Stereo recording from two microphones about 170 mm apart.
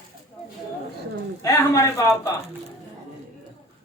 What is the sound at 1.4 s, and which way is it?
Speech, 20° left (ahead or behind).